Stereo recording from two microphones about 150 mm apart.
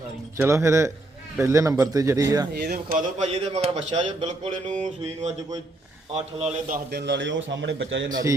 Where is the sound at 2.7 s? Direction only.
55° right (ahead or behind).